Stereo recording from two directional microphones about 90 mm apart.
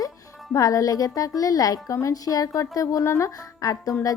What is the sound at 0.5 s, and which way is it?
A woman's voice, 40° left (ahead or behind).